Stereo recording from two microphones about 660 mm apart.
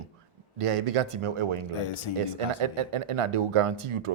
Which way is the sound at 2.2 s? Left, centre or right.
Right.